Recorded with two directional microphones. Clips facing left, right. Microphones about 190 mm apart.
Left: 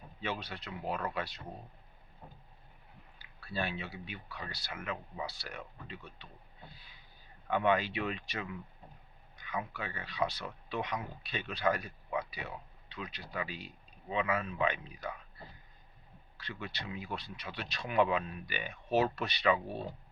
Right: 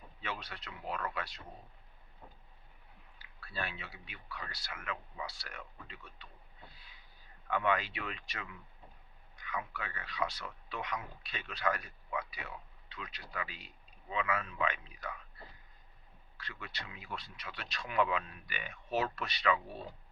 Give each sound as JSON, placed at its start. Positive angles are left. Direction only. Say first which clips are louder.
{"t": 0.2, "sound": "speech", "louder": "left 5 dB", "side_deg": 30}
{"t": 3.5, "sound": "speech", "louder": "left 5 dB", "side_deg": 30}
{"t": 16.5, "sound": "speech", "louder": "left 6 dB", "side_deg": 30}